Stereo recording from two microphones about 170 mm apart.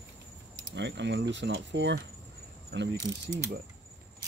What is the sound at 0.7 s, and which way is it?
Speech, 90° right.